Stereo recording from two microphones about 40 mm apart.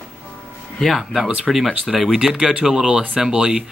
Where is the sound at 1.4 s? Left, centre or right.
Centre.